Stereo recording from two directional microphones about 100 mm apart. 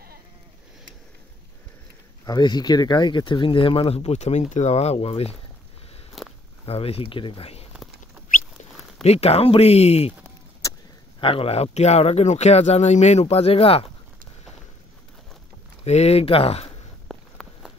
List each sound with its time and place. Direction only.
2.2 s speech: 45° left (ahead or behind); by 5.3 s 85° left
6.2 s walk: centre (ahead or behind)
6.6 s speech: 75° left (ahead or behind)
9.0 s speech: 90° left
11.1 s speech: 65° left (ahead or behind)
15.8 s speech: 90° left
17.1 s a sound: 5° left (ahead or behind)